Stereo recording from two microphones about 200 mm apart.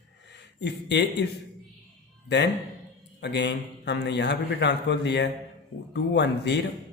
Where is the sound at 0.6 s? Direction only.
60° left (ahead or behind).